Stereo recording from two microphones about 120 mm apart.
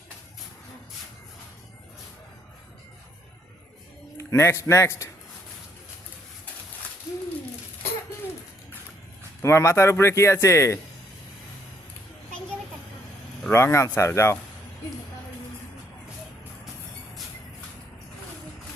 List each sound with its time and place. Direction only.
4.2 s a man's voice: 25° left (ahead or behind)
9.4 s a man's voice: 25° left (ahead or behind)
13.5 s a man's voice: 20° left (ahead or behind)